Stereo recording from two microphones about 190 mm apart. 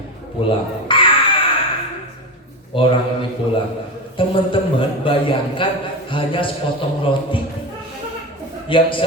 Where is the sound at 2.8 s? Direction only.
25° left (ahead or behind).